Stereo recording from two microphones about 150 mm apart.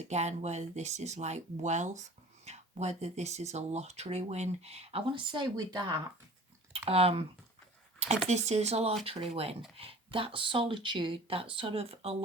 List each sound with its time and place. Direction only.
0.0 s speech: 50° right (ahead or behind); by 6.0 s 30° right (ahead or behind)
6.7 s speech: 40° right (ahead or behind)
7.9 s a sound: 45° right (ahead or behind)
8.3 s speech: 45° right (ahead or behind)